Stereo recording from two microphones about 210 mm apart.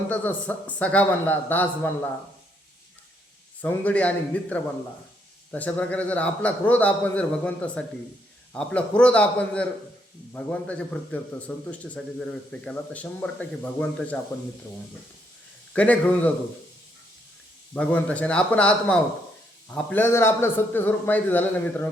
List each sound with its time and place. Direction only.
0.1 s a man's voice: 5° left (ahead or behind)
3.6 s a man's voice: 5° left (ahead or behind)
15.7 s a man's voice: 5° left (ahead or behind)
17.7 s a man's voice: 5° left (ahead or behind)